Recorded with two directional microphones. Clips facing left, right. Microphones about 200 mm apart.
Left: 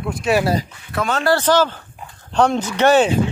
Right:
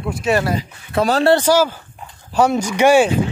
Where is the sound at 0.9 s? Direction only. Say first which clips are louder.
Right 4 dB; 35° right (ahead or behind).